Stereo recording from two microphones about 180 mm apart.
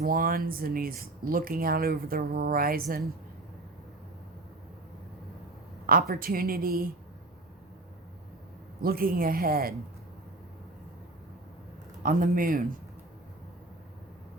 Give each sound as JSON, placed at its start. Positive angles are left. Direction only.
{"t": 0.0, "sound": "speech", "side_deg": -50}
{"t": 5.8, "sound": "speech", "side_deg": -55}
{"t": 8.8, "sound": "speech", "side_deg": -55}
{"t": 12.0, "sound": "speech", "side_deg": -50}